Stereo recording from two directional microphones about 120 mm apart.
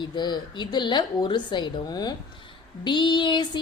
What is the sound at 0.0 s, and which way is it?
Speech, 40° left (ahead or behind).